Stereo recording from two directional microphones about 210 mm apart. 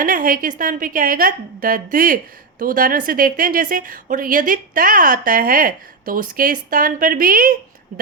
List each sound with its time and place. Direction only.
0.0 s a woman's voice: 40° right (ahead or behind)